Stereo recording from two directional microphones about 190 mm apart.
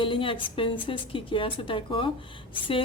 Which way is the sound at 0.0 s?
25° left (ahead or behind).